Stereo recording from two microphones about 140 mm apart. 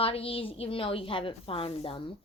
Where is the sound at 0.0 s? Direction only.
40° left (ahead or behind).